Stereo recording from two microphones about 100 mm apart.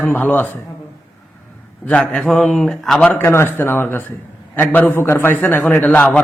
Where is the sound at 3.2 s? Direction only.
25° left (ahead or behind).